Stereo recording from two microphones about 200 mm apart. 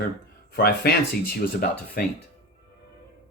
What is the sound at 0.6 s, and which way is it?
Speech, 50° left (ahead or behind).